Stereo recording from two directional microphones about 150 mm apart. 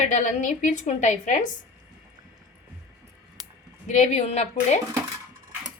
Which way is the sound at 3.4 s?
25° right (ahead or behind).